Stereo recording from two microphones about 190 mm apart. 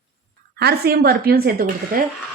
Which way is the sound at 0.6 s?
55° right (ahead or behind).